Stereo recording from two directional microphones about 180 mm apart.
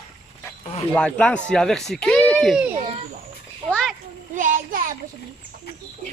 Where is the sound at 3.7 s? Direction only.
5° left (ahead or behind).